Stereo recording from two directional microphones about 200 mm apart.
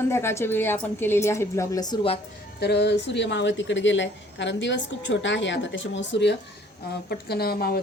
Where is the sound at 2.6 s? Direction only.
55° left (ahead or behind).